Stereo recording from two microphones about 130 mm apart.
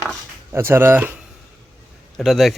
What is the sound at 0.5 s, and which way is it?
Speech, 20° right (ahead or behind).